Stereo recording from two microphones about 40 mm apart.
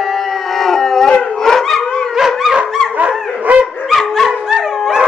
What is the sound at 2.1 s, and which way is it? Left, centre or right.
Dog, centre.